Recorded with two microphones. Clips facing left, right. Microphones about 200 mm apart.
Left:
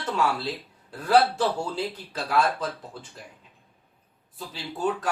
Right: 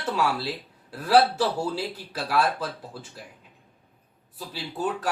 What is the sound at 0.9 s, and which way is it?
Speech, 5° right (ahead or behind).